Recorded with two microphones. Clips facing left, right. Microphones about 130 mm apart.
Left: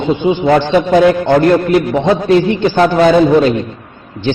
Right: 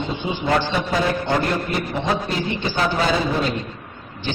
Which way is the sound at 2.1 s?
85° left.